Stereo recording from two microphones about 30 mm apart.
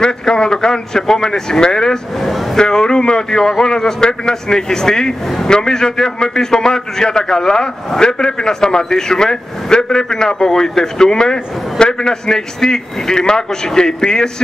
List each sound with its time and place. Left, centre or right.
0.0 s a man's voice: left
2.1 s speech: centre
2.5 s a man's voice: left